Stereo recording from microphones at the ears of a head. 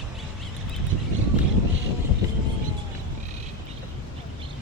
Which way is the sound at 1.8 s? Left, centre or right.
Left.